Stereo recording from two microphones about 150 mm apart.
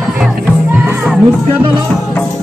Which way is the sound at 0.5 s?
10° right (ahead or behind).